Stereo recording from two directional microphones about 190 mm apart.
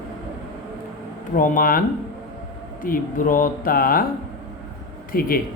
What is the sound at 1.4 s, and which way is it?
Speech, 45° left (ahead or behind).